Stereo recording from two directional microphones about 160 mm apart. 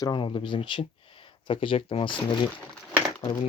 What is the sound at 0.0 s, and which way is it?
Speech, 30° left (ahead or behind).